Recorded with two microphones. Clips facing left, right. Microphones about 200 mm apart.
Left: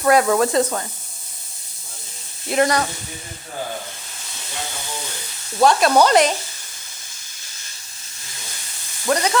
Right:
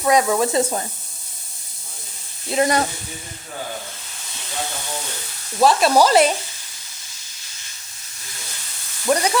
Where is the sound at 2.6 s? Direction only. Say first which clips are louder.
Even; 20° right (ahead or behind).